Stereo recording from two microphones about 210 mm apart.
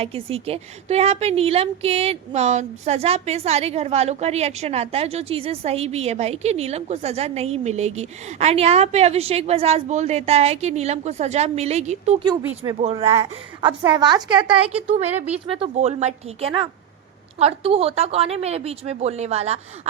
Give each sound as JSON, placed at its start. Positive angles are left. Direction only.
{"t": 0.0, "sound": "a woman's voice", "side_deg": -30}
{"t": 12.2, "sound": "a woman's voice", "side_deg": -20}